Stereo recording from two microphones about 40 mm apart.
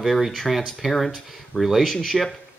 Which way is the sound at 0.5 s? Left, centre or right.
Centre.